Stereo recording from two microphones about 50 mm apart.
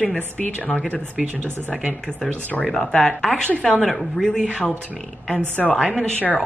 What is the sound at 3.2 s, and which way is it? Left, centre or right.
Speech, centre.